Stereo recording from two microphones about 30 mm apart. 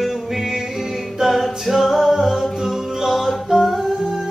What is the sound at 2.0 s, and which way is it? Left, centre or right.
Music, centre.